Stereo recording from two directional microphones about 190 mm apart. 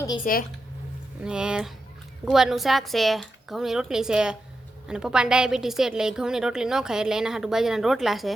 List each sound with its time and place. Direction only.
0.3 s speech: 45° left (ahead or behind)
1.2 s a woman's voice: 5° right (ahead or behind)